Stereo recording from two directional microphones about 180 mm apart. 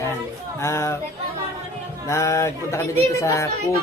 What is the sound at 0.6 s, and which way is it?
Speech, 15° left (ahead or behind).